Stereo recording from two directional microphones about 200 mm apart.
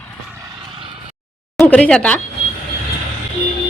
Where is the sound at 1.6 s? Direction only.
5° left (ahead or behind).